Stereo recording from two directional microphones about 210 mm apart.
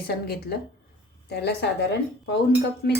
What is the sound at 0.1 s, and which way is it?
Speech, 45° left (ahead or behind).